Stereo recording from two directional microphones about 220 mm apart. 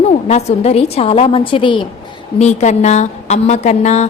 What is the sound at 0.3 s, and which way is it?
A woman's voice, 30° left (ahead or behind).